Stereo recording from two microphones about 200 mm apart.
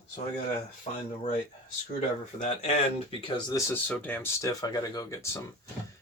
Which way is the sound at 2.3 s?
35° left (ahead or behind).